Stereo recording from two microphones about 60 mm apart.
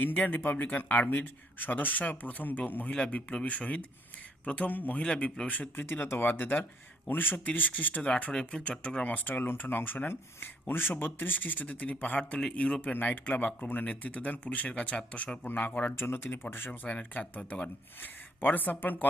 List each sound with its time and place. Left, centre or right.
0.0 s speech: left
5.0 s speech: centre
6.1 s speech: left
15.4 s speech: left
16.9 s speech: left